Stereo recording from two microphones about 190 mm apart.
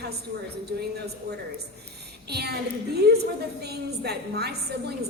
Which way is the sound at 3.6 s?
60° right (ahead or behind).